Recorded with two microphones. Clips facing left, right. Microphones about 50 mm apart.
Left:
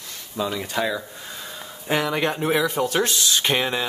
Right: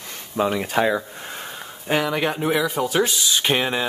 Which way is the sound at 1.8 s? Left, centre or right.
Centre.